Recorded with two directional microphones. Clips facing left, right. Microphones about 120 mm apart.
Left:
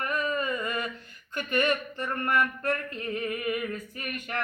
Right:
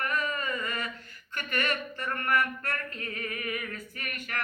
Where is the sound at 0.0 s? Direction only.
20° left (ahead or behind).